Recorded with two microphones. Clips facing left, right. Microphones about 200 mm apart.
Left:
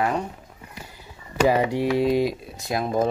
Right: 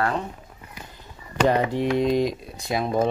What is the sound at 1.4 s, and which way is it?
Speech, 10° left (ahead or behind).